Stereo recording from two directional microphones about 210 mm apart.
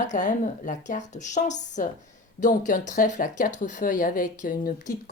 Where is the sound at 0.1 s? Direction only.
35° left (ahead or behind).